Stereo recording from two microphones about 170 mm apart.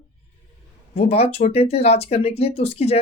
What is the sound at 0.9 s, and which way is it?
Speech, 35° left (ahead or behind).